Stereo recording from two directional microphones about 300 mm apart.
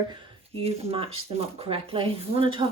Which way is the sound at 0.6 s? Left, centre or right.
Centre.